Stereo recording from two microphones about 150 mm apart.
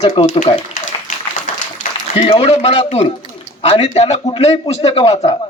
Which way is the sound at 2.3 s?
40° left (ahead or behind).